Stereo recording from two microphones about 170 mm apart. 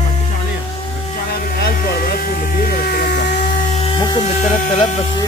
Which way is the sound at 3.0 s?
60° left (ahead or behind).